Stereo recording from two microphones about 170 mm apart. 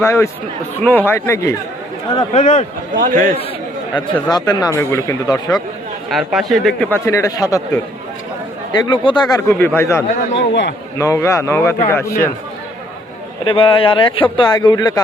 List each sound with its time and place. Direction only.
0.0 s a man's voice: 15° left (ahead or behind)
2.4 s a man's voice: 45° left (ahead or behind)
2.9 s a man's voice: 50° right (ahead or behind)
3.9 s speech: 25° left (ahead or behind)
6.1 s a man's voice: centre (ahead or behind)
7.0 s speech: 20° left (ahead or behind)
9.3 s a man's voice: 15° left (ahead or behind)
10.3 s a man's voice: 90° left
10.9 s a man's voice: 20° left (ahead or behind)
13.4 s speech: 30° left (ahead or behind)